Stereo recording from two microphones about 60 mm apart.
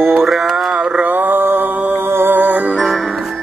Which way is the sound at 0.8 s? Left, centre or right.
Centre.